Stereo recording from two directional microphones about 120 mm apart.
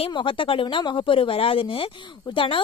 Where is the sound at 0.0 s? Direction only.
45° left (ahead or behind).